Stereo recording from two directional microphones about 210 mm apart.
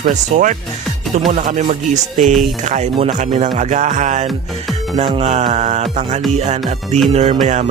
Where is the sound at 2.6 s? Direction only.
35° right (ahead or behind).